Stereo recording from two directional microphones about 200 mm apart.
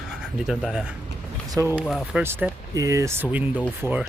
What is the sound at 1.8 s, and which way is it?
Speech, centre (ahead or behind).